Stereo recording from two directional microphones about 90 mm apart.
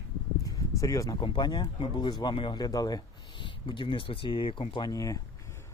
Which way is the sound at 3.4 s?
65° left (ahead or behind).